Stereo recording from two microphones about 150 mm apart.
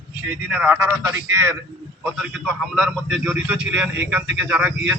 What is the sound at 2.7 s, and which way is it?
A man's voice, centre (ahead or behind).